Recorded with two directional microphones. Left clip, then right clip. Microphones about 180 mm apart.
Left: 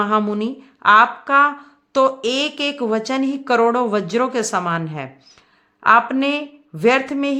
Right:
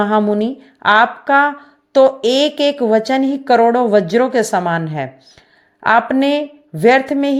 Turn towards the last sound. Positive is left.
turn(degrees=-20)  # may be behind; listen again after turning